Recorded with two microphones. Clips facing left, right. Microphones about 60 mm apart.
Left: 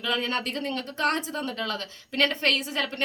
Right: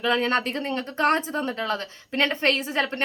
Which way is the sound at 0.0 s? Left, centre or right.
Right.